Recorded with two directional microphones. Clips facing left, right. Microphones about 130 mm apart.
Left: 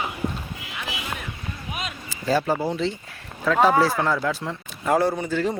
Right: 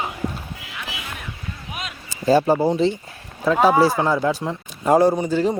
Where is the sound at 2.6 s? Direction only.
15° right (ahead or behind).